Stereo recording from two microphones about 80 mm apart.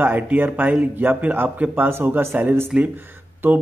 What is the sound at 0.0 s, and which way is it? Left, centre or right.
Speech, right.